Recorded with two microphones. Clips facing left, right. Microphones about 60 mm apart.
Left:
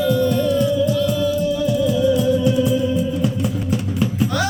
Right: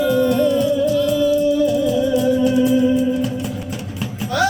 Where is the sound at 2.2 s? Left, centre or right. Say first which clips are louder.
Right 1 dB; right.